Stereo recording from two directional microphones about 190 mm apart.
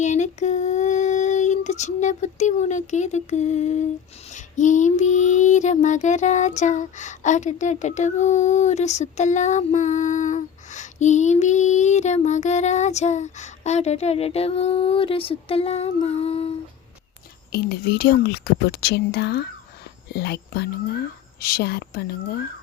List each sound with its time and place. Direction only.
0.0 s female singing: 40° left (ahead or behind)
4.3 s a sound: 40° left (ahead or behind)
17.5 s a woman's voice: 55° left (ahead or behind)